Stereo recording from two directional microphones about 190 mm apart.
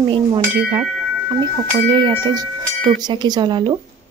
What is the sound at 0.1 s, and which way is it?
Speech, 25° right (ahead or behind).